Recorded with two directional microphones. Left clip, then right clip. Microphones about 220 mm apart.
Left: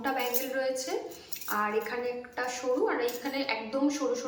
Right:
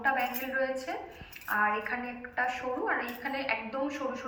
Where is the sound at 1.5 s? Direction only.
20° left (ahead or behind).